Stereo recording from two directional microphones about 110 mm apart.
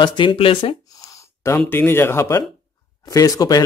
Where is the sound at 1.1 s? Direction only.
30° left (ahead or behind).